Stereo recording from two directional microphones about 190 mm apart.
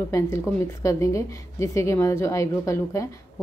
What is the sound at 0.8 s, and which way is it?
A woman's voice, 15° left (ahead or behind).